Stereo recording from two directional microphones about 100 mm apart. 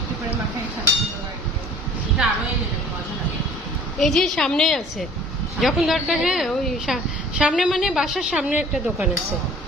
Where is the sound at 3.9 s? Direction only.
5° left (ahead or behind).